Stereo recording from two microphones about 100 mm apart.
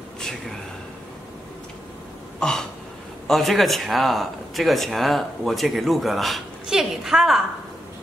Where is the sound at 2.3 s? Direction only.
5° left (ahead or behind).